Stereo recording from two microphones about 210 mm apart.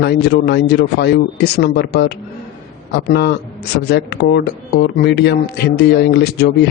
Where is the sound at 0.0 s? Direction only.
55° left (ahead or behind).